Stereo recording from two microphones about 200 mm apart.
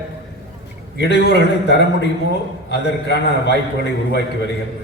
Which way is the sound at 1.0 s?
55° left (ahead or behind).